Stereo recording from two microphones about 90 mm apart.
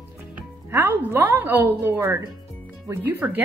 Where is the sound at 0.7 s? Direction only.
25° right (ahead or behind).